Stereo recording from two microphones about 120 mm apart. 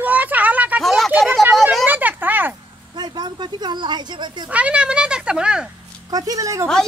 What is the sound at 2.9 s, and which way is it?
Speech, 35° right (ahead or behind).